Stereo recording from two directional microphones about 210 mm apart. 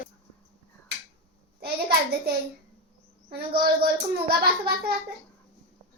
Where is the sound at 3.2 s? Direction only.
50° right (ahead or behind).